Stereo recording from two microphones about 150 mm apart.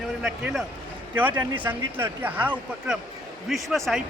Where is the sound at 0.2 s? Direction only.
Centre (ahead or behind).